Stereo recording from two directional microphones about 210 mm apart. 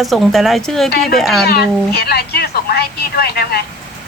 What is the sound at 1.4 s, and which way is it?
A woman's voice, 50° left (ahead or behind).